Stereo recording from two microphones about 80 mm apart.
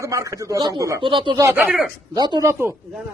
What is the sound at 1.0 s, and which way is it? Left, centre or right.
Speech, right.